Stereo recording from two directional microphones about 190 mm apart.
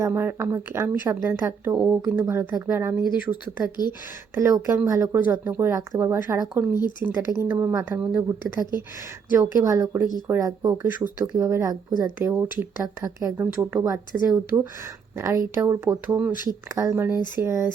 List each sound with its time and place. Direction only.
0.0 s speech: 10° right (ahead or behind)